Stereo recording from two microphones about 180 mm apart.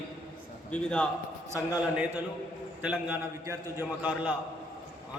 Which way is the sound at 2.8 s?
10° right (ahead or behind).